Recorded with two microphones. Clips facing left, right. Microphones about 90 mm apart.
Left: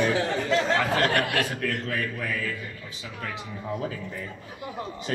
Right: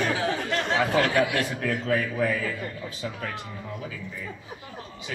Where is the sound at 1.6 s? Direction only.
10° right (ahead or behind).